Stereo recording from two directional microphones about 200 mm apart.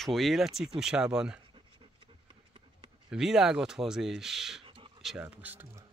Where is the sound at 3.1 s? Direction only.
5° right (ahead or behind).